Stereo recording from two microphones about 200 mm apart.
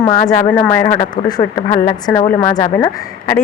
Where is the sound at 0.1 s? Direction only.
20° left (ahead or behind).